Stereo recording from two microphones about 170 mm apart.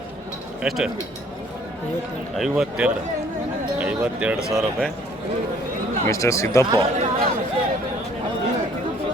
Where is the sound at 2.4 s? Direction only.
5° right (ahead or behind).